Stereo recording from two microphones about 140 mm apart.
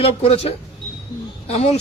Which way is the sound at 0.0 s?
45° left (ahead or behind).